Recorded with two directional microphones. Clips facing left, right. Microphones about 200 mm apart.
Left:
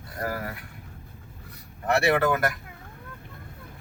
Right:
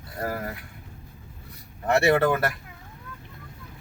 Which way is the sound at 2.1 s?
25° right (ahead or behind).